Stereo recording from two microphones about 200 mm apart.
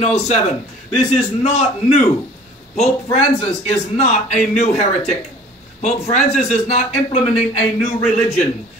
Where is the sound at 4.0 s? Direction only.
35° left (ahead or behind).